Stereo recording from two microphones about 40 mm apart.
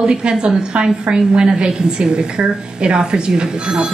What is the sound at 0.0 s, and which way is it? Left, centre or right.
A woman's voice, right.